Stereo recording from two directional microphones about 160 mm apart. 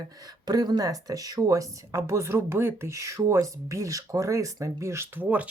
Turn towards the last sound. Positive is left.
turn(degrees=-10)  # may be behind; listen again after turning